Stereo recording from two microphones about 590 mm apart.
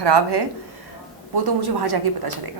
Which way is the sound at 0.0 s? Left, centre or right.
Right.